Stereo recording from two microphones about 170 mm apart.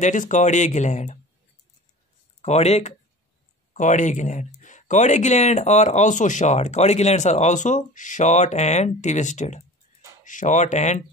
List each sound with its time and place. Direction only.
0.0 s speech: 45° left (ahead or behind)
2.4 s speech: 40° left (ahead or behind)